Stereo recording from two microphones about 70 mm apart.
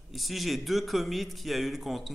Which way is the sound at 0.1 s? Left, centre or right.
Centre.